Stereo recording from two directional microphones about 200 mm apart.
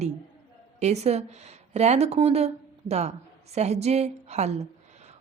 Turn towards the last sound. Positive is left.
turn(degrees=-35)  # may be behind; listen again after turning